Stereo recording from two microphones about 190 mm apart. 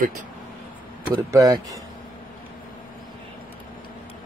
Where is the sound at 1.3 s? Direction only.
20° right (ahead or behind).